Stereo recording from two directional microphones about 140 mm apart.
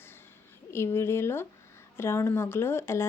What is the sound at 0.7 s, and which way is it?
Speech, 15° left (ahead or behind).